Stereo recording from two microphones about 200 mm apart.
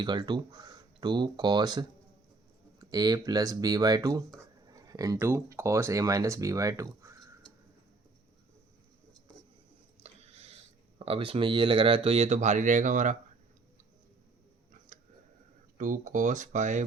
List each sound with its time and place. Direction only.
0.0 s speech: 20° right (ahead or behind)
10.0 s speech: 30° right (ahead or behind)
15.8 s speech: 40° right (ahead or behind)